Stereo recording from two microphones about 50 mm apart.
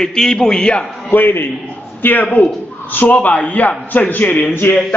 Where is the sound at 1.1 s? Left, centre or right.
Left.